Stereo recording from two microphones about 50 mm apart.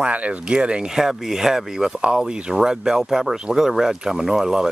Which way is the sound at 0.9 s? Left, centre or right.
Centre.